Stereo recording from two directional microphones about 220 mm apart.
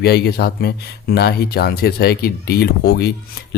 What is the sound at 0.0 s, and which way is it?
Speech, 45° left (ahead or behind).